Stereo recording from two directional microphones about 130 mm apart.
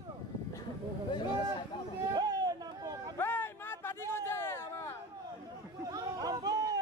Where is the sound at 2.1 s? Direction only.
30° right (ahead or behind).